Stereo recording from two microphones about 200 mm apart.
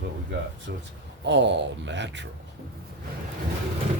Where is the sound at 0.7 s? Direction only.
60° right (ahead or behind).